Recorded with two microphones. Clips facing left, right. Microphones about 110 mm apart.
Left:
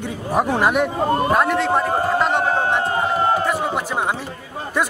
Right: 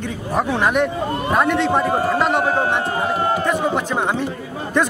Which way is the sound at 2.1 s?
Centre (ahead or behind).